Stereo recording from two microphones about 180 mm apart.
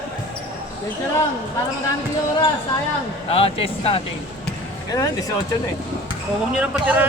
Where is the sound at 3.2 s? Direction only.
30° left (ahead or behind).